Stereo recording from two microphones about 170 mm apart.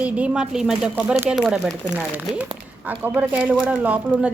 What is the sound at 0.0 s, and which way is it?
A woman's voice, 5° right (ahead or behind).